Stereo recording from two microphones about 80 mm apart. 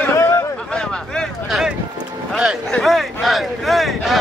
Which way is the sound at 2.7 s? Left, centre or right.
Centre.